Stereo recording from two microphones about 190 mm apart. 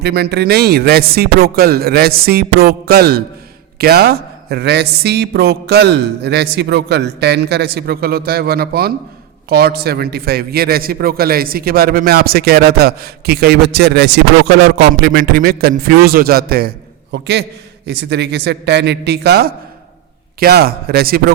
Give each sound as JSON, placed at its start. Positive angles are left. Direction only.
{"t": 0.0, "sound": "a man's voice", "side_deg": -60}